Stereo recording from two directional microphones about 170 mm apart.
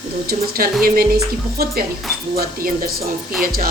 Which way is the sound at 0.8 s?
60° right (ahead or behind).